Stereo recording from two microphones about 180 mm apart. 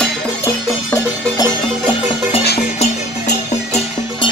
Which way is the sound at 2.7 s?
35° left (ahead or behind).